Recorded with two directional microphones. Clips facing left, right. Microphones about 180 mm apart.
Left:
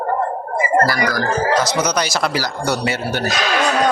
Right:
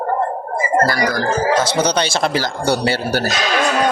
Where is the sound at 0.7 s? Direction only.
25° right (ahead or behind).